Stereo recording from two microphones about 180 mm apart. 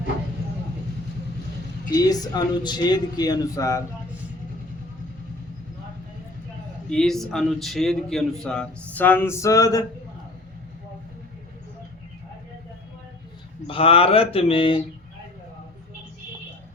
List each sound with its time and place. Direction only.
1.9 s a man's voice: 20° left (ahead or behind)
6.9 s a man's voice: 5° left (ahead or behind); by 9.8 s 20° left (ahead or behind)
13.7 s speech: 30° left (ahead or behind)